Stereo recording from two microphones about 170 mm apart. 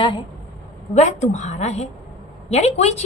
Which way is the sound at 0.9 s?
40° left (ahead or behind).